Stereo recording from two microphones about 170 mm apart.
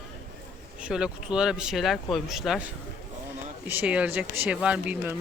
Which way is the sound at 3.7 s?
10° right (ahead or behind).